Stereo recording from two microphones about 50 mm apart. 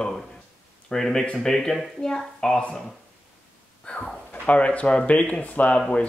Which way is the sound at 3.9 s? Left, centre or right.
Left.